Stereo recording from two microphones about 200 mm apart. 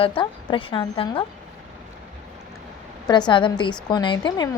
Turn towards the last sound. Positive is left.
turn(degrees=20)  # may be behind; listen again after turning